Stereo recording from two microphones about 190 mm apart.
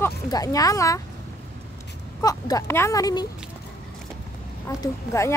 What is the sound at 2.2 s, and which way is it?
Speech, 20° left (ahead or behind).